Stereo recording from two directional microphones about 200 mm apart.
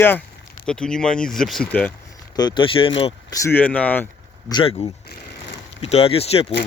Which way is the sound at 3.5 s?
10° left (ahead or behind).